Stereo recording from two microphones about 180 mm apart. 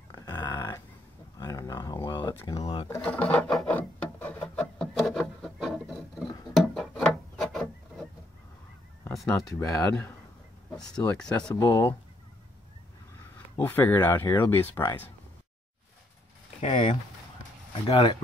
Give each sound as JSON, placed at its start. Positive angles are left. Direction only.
{"t": 0.1, "sound": "dog", "side_deg": 20}
{"t": 1.4, "sound": "a sound", "side_deg": 20}
{"t": 2.9, "sound": "a sound", "side_deg": 10}
{"t": 4.6, "sound": "wood", "side_deg": 0}
{"t": 6.5, "sound": "a sound", "side_deg": 0}
{"t": 9.2, "sound": "speech", "side_deg": 15}
{"t": 11.5, "sound": "speech", "side_deg": 15}
{"t": 13.6, "sound": "speech", "side_deg": 10}
{"t": 16.6, "sound": "speech", "side_deg": 40}
{"t": 17.8, "sound": "speech", "side_deg": 30}